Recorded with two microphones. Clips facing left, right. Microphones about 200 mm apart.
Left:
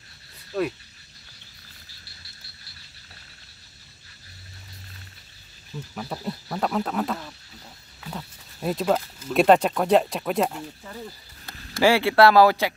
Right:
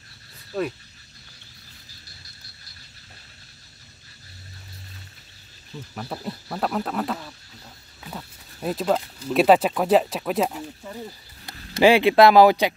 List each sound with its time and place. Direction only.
0.5 s speech: centre (ahead or behind)
5.9 s speech: centre (ahead or behind)
11.4 s speech: 20° right (ahead or behind)